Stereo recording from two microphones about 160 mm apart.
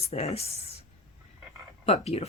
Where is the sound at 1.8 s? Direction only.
40° left (ahead or behind).